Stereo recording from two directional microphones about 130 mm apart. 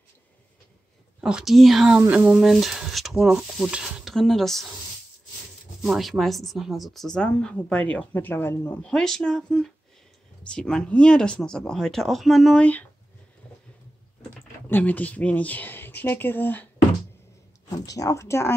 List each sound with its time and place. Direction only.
1.2 s speech: 5° right (ahead or behind)
5.8 s speech: centre (ahead or behind); by 8.8 s 15° left (ahead or behind)
8.8 s speech: 5° left (ahead or behind)
14.7 s speech: 10° left (ahead or behind)
17.6 s speech: 25° left (ahead or behind)